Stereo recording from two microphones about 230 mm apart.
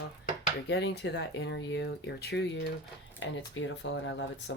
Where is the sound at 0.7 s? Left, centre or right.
Left.